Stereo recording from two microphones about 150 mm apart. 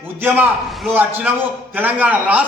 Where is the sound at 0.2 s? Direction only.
15° right (ahead or behind).